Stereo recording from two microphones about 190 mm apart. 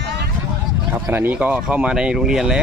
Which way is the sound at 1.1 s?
10° right (ahead or behind).